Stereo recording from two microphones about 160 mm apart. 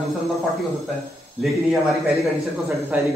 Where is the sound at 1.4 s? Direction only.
Centre (ahead or behind).